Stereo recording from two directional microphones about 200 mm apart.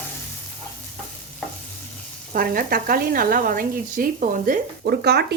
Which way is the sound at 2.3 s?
45° right (ahead or behind).